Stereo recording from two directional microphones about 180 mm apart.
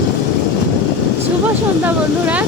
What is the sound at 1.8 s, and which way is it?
Speech, 10° right (ahead or behind).